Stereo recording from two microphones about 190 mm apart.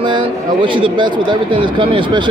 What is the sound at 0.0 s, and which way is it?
Speech, 25° right (ahead or behind).